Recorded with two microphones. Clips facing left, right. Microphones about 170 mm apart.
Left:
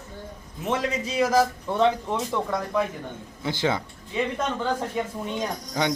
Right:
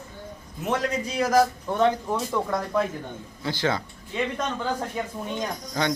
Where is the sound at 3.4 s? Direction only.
20° left (ahead or behind).